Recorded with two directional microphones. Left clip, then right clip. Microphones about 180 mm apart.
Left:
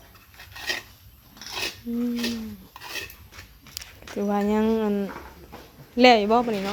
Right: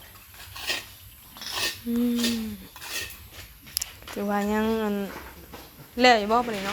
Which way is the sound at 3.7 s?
25° left (ahead or behind).